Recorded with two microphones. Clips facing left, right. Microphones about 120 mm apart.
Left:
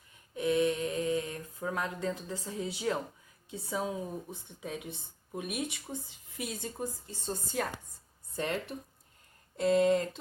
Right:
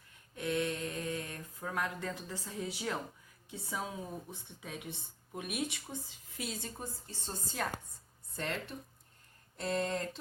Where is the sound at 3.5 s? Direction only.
20° left (ahead or behind).